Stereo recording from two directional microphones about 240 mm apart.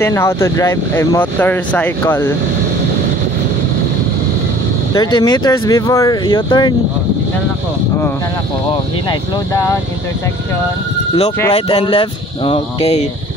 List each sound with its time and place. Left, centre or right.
0.0 s speech: centre
4.9 s speech: centre
9.5 s speech: centre
11.5 s speech: left